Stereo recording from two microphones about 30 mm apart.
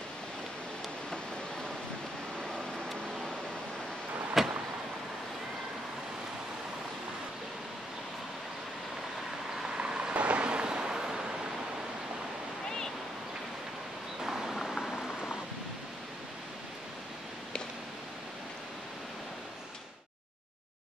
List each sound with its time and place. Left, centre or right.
2.4 s vehicle: centre
4.4 s vehicle: centre
9.8 s vehicle: right
10.1 s vehicle: right
14.2 s a sound: centre
14.5 s a sound: centre